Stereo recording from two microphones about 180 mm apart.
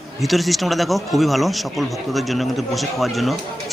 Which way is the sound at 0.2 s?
Centre (ahead or behind).